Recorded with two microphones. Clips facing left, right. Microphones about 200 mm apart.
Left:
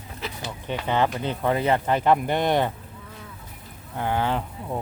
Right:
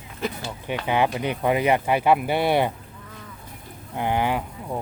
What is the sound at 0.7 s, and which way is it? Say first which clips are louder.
Speech: right 1 dB; 10° right (ahead or behind).